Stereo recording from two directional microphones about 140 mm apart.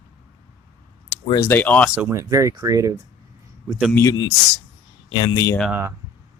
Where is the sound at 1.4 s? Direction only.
10° left (ahead or behind).